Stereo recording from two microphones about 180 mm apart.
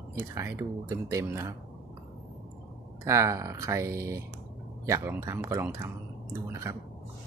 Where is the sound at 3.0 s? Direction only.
15° right (ahead or behind).